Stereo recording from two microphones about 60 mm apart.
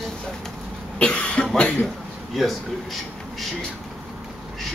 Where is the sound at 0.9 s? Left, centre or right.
Centre.